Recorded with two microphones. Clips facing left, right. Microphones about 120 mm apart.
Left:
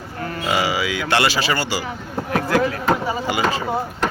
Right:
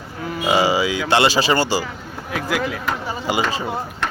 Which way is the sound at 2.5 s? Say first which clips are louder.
Left 3 dB; 5° right (ahead or behind).